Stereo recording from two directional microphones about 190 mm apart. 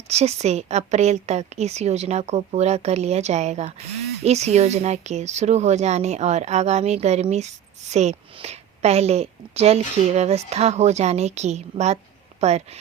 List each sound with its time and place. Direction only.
0.1 s speech: 35° right (ahead or behind)